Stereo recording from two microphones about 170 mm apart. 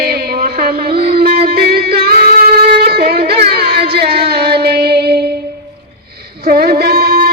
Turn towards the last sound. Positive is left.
turn(degrees=-60)  # may be behind; listen again after turning